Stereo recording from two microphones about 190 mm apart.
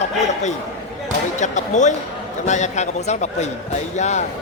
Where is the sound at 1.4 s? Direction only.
40° left (ahead or behind).